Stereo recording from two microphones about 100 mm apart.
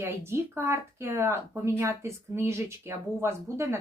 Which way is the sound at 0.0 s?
25° right (ahead or behind).